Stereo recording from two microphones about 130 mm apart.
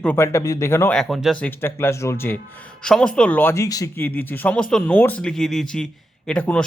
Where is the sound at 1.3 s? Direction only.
15° left (ahead or behind).